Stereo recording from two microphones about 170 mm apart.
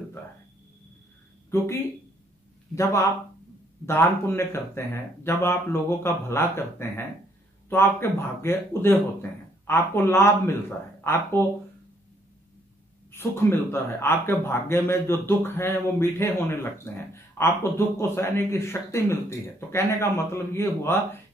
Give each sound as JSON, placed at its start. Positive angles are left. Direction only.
{"t": 1.5, "sound": "speech", "side_deg": 15}
{"t": 2.7, "sound": "speech", "side_deg": 15}
{"t": 13.1, "sound": "speech", "side_deg": 15}